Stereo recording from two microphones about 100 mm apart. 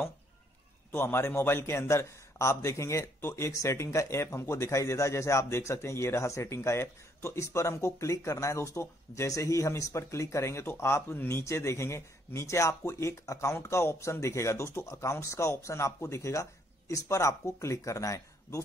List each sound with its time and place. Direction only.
0.9 s a man's voice: 25° left (ahead or behind)